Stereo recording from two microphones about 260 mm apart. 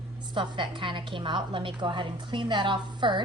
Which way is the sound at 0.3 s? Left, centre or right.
Centre.